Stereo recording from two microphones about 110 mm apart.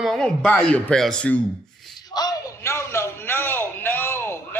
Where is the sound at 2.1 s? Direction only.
40° left (ahead or behind).